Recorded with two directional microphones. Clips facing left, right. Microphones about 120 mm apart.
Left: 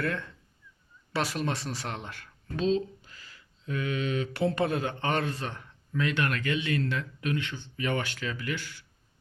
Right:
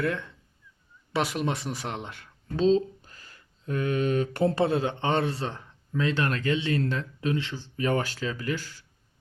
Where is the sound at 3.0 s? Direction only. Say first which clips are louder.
Right 1 dB; 45° right (ahead or behind).